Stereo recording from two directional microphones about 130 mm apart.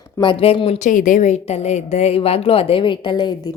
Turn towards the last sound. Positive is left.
turn(degrees=35)  # may be behind; listen again after turning